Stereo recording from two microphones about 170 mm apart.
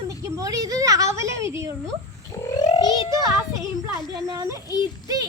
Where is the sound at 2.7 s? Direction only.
25° left (ahead or behind).